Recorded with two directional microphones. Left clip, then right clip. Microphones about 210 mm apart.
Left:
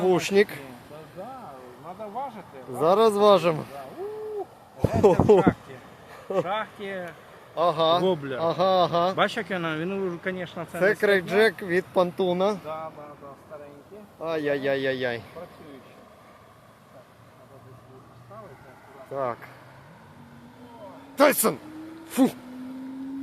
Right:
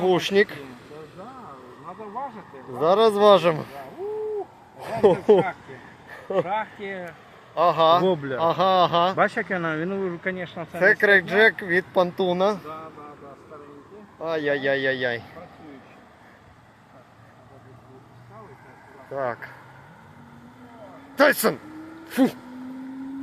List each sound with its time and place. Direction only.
0.0 s speech: 10° left (ahead or behind)
2.7 s speech: 15° left (ahead or behind)
4.8 s speech: 10° left (ahead or behind)
8.0 s speech: 25° right (ahead or behind)
8.4 s speech: centre (ahead or behind)
9.1 s speech: 15° right (ahead or behind); by 12.6 s 5° left (ahead or behind)
14.2 s speech: 10° left (ahead or behind)
19.1 s speech: 5° left (ahead or behind)
21.2 s speech: centre (ahead or behind)